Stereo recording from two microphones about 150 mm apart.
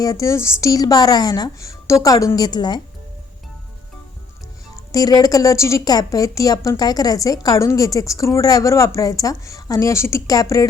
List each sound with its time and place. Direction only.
0.0 s a woman's voice: 25° left (ahead or behind)
4.9 s a woman's voice: 25° left (ahead or behind)